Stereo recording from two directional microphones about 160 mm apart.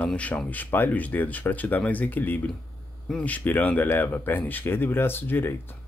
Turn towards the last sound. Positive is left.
turn(degrees=15)  # may be behind; listen again after turning